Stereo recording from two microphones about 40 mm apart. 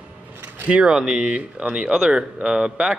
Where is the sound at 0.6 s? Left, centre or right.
Right.